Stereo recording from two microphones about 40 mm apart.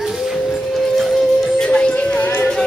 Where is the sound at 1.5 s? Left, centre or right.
Left.